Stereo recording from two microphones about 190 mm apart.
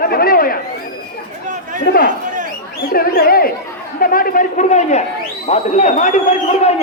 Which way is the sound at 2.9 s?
50° left (ahead or behind).